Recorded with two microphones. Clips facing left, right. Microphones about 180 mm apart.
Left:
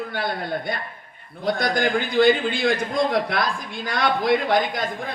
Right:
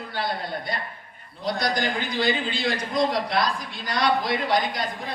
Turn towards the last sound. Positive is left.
turn(degrees=50)  # may be behind; listen again after turning